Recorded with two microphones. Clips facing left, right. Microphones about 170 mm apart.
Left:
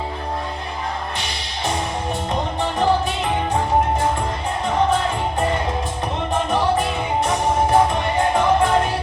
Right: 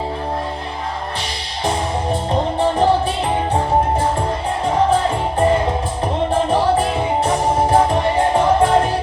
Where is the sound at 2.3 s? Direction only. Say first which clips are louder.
Right 7 dB; 30° right (ahead or behind).